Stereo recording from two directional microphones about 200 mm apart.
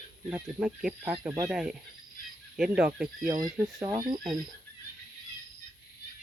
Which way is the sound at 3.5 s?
15° right (ahead or behind).